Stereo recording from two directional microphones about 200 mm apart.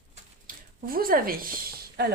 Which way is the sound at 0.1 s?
45° right (ahead or behind).